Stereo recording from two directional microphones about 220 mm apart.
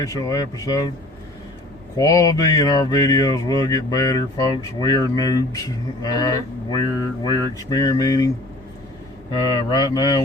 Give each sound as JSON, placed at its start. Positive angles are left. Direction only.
{"t": 0.0, "sound": "speech", "side_deg": 15}
{"t": 2.0, "sound": "speech", "side_deg": 15}
{"t": 9.3, "sound": "speech", "side_deg": 20}